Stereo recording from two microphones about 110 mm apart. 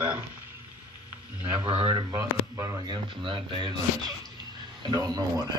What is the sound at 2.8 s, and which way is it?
Speech, 45° right (ahead or behind).